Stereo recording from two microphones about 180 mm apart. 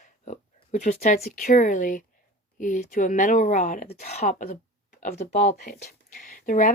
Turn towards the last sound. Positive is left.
turn(degrees=45)  # may be behind; listen again after turning